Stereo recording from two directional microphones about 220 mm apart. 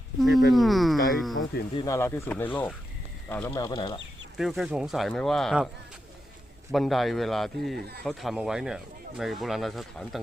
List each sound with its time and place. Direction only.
0.2 s speech: centre (ahead or behind)
1.7 s speech: 15° left (ahead or behind)
4.4 s speech: centre (ahead or behind)
6.7 s speech: centre (ahead or behind)